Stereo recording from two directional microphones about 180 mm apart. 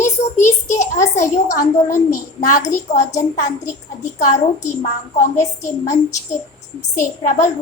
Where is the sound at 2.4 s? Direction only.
50° left (ahead or behind).